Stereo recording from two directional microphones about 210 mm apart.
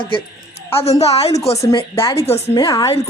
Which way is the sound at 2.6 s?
20° left (ahead or behind).